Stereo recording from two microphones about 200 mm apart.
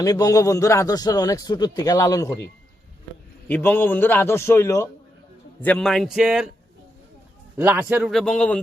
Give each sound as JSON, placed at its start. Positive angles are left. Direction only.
{"t": 0.0, "sound": "a man's voice", "side_deg": 20}
{"t": 3.5, "sound": "a man's voice", "side_deg": 10}
{"t": 7.5, "sound": "a man's voice", "side_deg": -10}
{"t": 8.1, "sound": "speech", "side_deg": 5}